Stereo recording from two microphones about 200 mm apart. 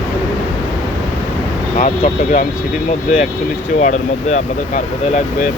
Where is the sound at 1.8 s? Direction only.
40° left (ahead or behind).